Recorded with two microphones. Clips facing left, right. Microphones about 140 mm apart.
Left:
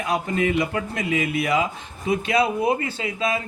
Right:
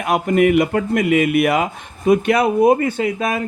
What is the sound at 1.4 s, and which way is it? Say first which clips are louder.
A man's voice: right 6 dB; 60° right (ahead or behind).